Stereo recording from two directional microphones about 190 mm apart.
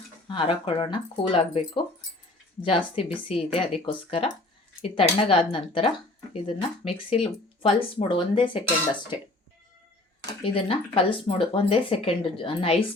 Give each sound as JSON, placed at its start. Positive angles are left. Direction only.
{"t": 0.3, "sound": "speech", "side_deg": 25}
{"t": 10.4, "sound": "speech", "side_deg": 30}